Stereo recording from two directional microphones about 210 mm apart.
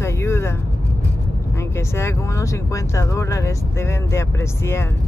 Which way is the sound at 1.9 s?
10° left (ahead or behind).